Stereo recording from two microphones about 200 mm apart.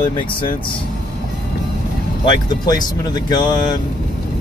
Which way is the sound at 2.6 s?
20° left (ahead or behind).